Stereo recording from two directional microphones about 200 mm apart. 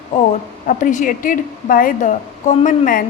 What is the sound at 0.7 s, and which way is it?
A woman's voice, 40° left (ahead or behind).